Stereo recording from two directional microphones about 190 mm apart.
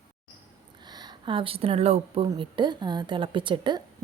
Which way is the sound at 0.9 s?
20° right (ahead or behind).